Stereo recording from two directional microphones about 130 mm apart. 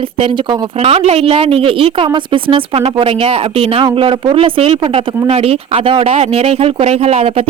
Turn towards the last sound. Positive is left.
turn(degrees=-50)  # may be behind; listen again after turning